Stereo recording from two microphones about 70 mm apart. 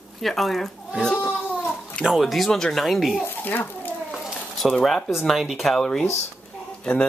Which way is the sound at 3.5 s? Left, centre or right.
Left.